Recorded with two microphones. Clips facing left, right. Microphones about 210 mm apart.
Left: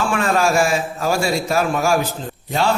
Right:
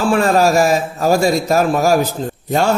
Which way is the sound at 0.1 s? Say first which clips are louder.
Right 7 dB; 35° right (ahead or behind).